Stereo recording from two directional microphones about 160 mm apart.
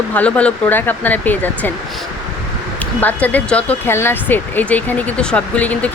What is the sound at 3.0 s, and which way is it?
Speech, 10° left (ahead or behind).